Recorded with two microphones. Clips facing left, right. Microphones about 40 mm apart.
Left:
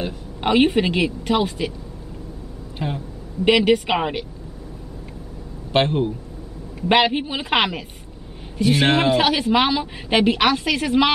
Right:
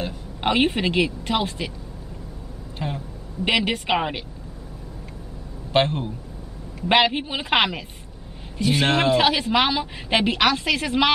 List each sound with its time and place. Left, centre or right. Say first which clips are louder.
0.4 s a woman's voice: left 4 dB; centre
2.8 s a woman's voice: left 3 dB; centre
5.7 s a man's voice: left 2 dB; centre
8.8 s speech: left 1 dB; centre
9.2 s a woman's voice: left 2 dB; centre